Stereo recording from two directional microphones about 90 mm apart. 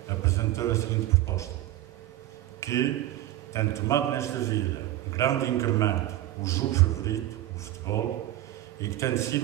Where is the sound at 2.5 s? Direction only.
35° left (ahead or behind).